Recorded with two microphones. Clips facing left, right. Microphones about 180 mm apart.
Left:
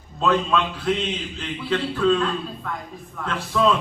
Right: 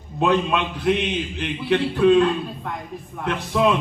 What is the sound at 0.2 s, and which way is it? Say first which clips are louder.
A man's voice: right 1 dB; 20° right (ahead or behind).